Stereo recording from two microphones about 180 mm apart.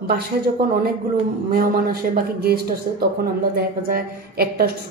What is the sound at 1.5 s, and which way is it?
Speech, 60° right (ahead or behind).